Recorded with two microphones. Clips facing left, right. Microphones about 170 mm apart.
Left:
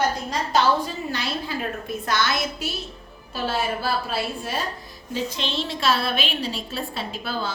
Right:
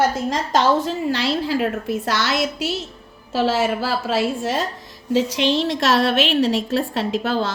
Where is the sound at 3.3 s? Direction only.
90° right.